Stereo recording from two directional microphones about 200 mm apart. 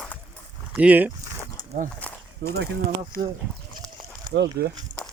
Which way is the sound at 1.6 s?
20° left (ahead or behind).